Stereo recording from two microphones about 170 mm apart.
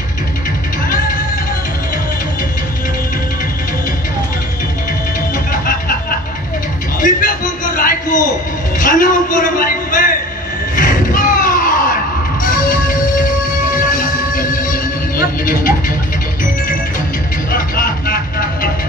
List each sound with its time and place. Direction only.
0.8 s music: 55° left (ahead or behind)
5.5 s music: 55° left (ahead or behind)
7.0 s a sound: 55° left (ahead or behind)
12.4 s music: 55° left (ahead or behind)
17.5 s music: 60° left (ahead or behind)